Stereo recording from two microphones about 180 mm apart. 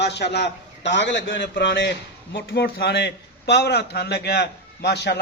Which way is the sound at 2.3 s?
65° left (ahead or behind).